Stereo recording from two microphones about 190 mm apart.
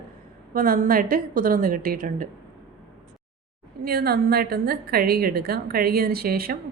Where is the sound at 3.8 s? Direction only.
55° right (ahead or behind).